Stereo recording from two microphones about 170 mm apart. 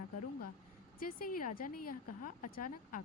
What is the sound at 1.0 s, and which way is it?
Speech, 55° left (ahead or behind).